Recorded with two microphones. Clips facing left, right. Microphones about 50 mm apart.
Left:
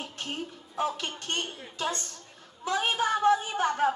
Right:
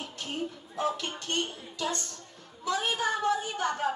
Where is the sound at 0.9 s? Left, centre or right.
Left.